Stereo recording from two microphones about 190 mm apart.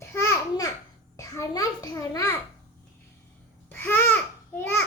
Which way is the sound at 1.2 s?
15° left (ahead or behind).